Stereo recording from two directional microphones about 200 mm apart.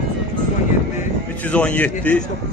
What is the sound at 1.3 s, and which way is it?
Speech, 5° left (ahead or behind).